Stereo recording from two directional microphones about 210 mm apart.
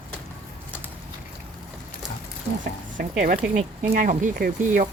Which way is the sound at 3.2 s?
40° right (ahead or behind).